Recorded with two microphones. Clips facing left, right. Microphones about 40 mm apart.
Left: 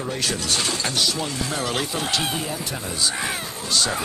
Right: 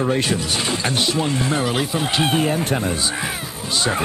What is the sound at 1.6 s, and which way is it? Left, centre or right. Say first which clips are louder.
Speech: right 4 dB; centre.